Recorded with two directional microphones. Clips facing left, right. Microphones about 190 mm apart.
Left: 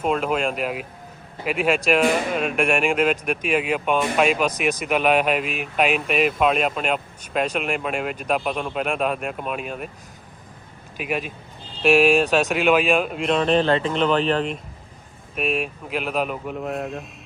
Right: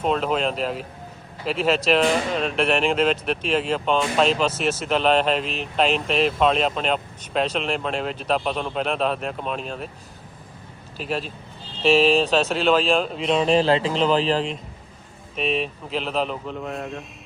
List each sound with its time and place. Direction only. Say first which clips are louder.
0.0 s speech: even; 10° left (ahead or behind)
10.9 s speech: left 1 dB; 15° left (ahead or behind); by 13.7 s centre (ahead or behind)
13.7 s speech: even; 30° right (ahead or behind)
15.4 s speech: even; 10° left (ahead or behind)